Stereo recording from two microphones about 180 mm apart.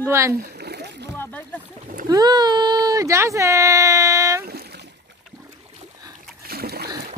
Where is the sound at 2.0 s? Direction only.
20° right (ahead or behind).